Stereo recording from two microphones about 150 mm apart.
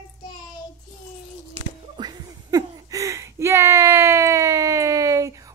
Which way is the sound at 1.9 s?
30° right (ahead or behind).